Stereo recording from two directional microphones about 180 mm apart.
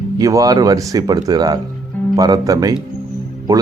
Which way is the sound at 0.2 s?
20° right (ahead or behind).